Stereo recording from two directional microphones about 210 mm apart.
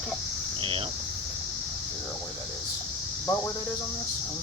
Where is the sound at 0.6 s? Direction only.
25° right (ahead or behind).